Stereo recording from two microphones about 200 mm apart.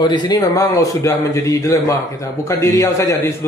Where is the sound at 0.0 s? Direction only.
20° left (ahead or behind).